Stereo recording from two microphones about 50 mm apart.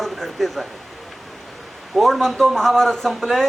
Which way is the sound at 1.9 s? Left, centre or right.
Centre.